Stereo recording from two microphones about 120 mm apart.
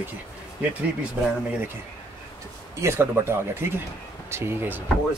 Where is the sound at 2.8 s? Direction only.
20° right (ahead or behind).